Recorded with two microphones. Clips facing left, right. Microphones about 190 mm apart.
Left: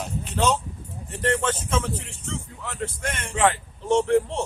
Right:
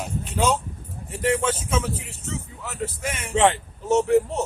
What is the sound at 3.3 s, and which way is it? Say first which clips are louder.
Speech: right 3 dB; 25° right (ahead or behind).